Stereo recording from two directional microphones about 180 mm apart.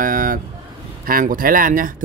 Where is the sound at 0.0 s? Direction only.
50° right (ahead or behind).